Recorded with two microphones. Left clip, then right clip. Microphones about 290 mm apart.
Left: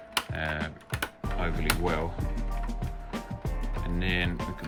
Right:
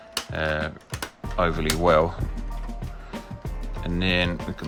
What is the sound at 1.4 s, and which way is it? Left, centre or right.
Speech, centre.